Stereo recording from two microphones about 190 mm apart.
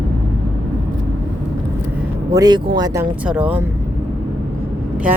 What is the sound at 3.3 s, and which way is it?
Speech, 5° right (ahead or behind).